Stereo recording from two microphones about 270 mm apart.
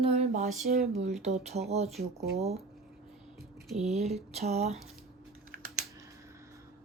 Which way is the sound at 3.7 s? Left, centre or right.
Right.